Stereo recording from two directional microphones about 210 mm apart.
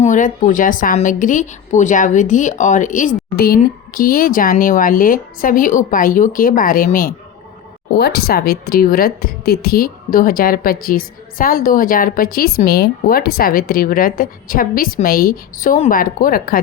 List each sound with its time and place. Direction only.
0.0 s a woman's voice: 35° left (ahead or behind)